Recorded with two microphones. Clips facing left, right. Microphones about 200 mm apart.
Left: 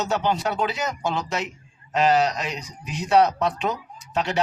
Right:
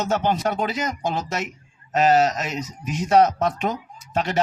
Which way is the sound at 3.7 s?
50° right (ahead or behind).